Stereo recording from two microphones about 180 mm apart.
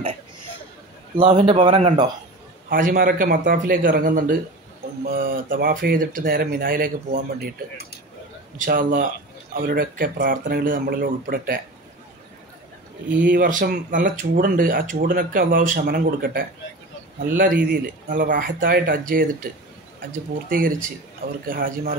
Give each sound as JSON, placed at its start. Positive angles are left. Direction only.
{"t": 1.1, "sound": "speech", "side_deg": -25}
{"t": 2.7, "sound": "speech", "side_deg": -50}
{"t": 8.5, "sound": "speech", "side_deg": -50}
{"t": 13.1, "sound": "speech", "side_deg": -50}